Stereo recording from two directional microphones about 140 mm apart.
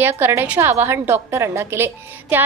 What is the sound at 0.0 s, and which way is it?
A woman's voice, 15° right (ahead or behind).